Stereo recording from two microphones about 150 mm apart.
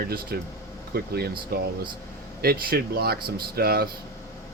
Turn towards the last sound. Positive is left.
turn(degrees=-90)